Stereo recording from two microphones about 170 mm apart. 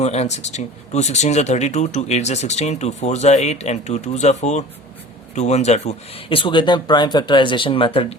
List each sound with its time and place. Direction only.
0.0 s speech: 40° left (ahead or behind)